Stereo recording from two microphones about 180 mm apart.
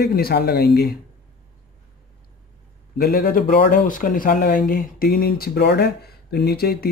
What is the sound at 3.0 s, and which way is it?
Speech, 55° left (ahead or behind).